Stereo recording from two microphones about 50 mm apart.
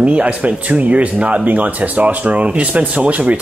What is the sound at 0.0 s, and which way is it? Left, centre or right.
Speech, right.